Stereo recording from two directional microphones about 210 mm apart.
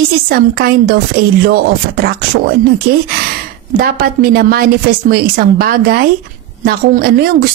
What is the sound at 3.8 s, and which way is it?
A woman's voice, 45° right (ahead or behind).